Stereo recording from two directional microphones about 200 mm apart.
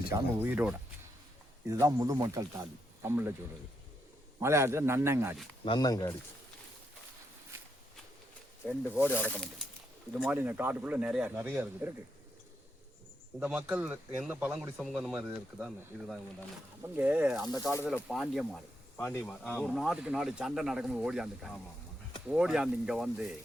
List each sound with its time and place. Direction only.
0.1 s speech: 10° right (ahead or behind)
4.4 s speech: 15° right (ahead or behind)
5.6 s speech: 20° left (ahead or behind)
8.6 s speech: 5° right (ahead or behind)
9.0 s speech: 10° left (ahead or behind)
10.2 s speech: 10° right (ahead or behind)
13.4 s speech: 5° right (ahead or behind)
17.4 s speech: 20° right (ahead or behind)
17.8 s speech: centre (ahead or behind)
18.9 s speech: 10° left (ahead or behind)
19.2 s speech: centre (ahead or behind)